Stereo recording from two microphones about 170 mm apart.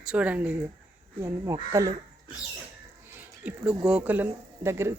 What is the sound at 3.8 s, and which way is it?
Speech, 5° right (ahead or behind).